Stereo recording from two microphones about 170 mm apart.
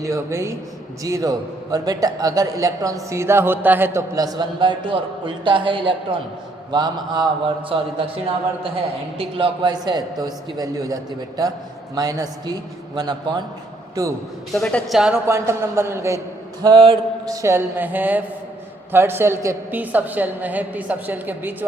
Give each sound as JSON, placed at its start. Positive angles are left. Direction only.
{"t": 0.0, "sound": "a woman's voice", "side_deg": -20}
{"t": 9.1, "sound": "a man's voice", "side_deg": -30}
{"t": 14.5, "sound": "speech", "side_deg": 5}
{"t": 15.3, "sound": "a woman's voice", "side_deg": -15}